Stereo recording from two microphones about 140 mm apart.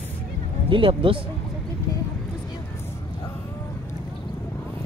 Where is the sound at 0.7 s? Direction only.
40° right (ahead or behind).